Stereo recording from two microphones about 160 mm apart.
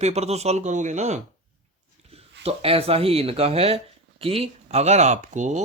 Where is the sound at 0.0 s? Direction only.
40° right (ahead or behind).